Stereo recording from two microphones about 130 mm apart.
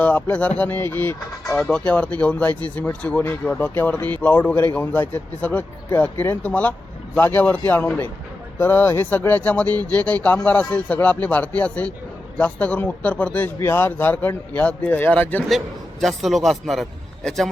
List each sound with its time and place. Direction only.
0.0 s speech: 15° left (ahead or behind)
15.4 s a man's voice: centre (ahead or behind)